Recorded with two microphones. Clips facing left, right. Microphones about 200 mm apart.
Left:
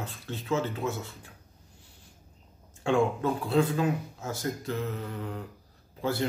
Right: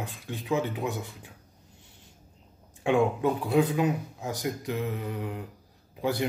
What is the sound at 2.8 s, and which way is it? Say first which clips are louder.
Speech: right 2 dB; 15° right (ahead or behind).